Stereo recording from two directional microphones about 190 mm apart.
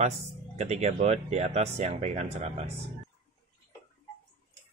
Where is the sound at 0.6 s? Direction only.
35° right (ahead or behind).